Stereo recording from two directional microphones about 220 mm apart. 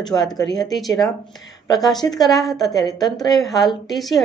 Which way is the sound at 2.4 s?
Centre (ahead or behind).